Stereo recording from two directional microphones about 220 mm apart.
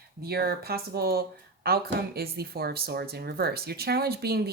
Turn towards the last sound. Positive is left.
turn(degrees=-45)  # may be behind; listen again after turning